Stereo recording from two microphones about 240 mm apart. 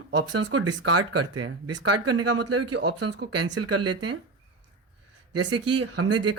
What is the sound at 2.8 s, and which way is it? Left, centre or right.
Speech, right.